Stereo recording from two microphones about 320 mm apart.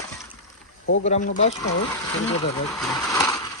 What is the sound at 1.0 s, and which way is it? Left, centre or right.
Speech, left.